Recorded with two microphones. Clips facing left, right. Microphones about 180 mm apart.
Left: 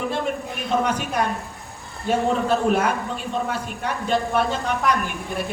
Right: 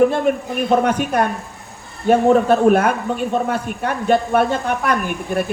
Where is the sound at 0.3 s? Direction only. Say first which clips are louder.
Right 8 dB; 55° right (ahead or behind).